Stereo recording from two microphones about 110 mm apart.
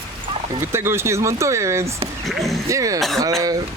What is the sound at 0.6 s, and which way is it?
Speech, 20° right (ahead or behind).